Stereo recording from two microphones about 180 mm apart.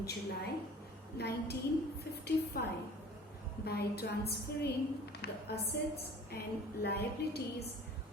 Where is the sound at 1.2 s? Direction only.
65° left (ahead or behind).